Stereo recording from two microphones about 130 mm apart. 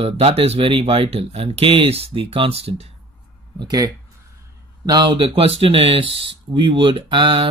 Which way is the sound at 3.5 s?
30° right (ahead or behind).